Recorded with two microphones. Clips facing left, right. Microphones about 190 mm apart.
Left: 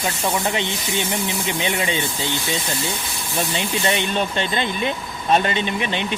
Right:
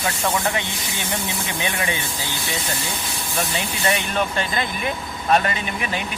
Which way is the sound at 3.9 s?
25° left (ahead or behind).